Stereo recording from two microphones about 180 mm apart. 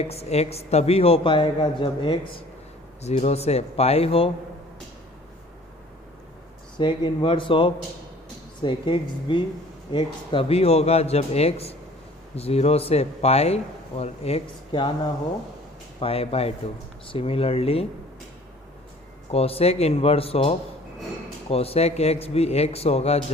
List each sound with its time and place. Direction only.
0.0 s a man's voice: 35° left (ahead or behind)
3.0 s a man's voice: 35° left (ahead or behind)
6.7 s a man's voice: 25° left (ahead or behind)
16.0 s a man's voice: 30° left (ahead or behind)
19.3 s a man's voice: 35° left (ahead or behind)